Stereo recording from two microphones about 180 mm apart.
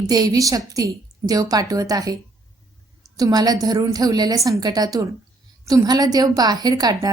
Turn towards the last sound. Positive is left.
turn(degrees=-20)  # may be behind; listen again after turning